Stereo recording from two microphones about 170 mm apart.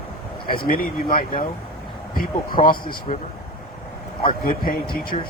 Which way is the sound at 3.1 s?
40° left (ahead or behind).